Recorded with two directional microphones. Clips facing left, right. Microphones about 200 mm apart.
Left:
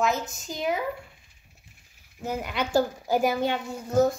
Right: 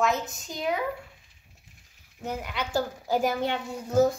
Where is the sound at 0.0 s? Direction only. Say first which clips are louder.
Even; centre (ahead or behind).